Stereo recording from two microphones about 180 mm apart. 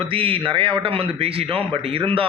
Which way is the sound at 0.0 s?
30° right (ahead or behind).